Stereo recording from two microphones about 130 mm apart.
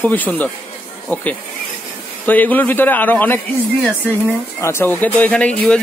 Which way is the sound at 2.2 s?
15° left (ahead or behind).